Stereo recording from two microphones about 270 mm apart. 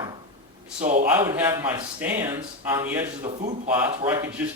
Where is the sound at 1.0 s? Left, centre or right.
Centre.